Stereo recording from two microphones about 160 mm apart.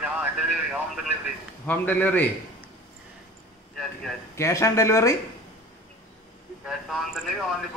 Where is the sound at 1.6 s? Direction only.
10° left (ahead or behind).